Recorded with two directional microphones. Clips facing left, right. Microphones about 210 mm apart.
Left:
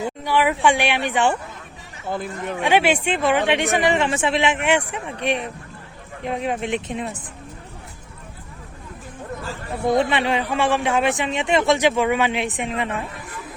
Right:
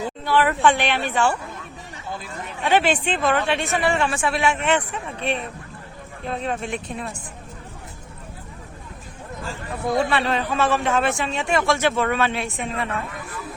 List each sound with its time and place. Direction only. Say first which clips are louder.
0.0 s a man's voice: even; 15° left (ahead or behind)
2.0 s speech: left 7 dB; 55° left (ahead or behind)
2.6 s a man's voice: left 1 dB; 10° left (ahead or behind)
9.8 s a man's voice: left 2 dB; 20° left (ahead or behind)